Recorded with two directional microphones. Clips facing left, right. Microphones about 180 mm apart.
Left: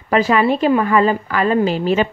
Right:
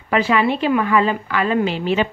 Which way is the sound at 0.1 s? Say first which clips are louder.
Left 3 dB; 40° left (ahead or behind).